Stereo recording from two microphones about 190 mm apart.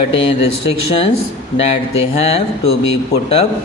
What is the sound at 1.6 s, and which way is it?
Speech, 30° left (ahead or behind).